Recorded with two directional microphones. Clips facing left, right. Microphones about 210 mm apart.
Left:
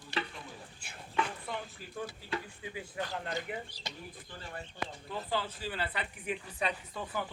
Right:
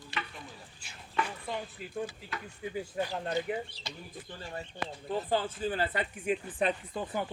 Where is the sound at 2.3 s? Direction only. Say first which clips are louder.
Left 4 dB; 30° left (ahead or behind).